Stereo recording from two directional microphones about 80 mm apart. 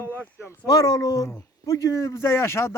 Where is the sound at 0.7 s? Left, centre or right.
Left.